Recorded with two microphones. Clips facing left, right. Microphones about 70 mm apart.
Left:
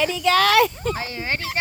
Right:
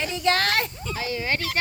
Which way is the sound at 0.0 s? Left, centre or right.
Left.